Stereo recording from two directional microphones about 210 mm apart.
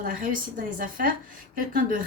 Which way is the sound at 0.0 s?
40° right (ahead or behind).